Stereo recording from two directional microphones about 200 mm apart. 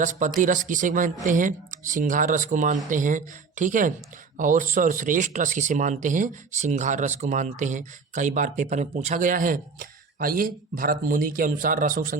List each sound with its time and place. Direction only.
0.0 s speech: 40° right (ahead or behind)